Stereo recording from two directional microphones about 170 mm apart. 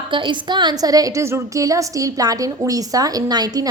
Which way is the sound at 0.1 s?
30° right (ahead or behind).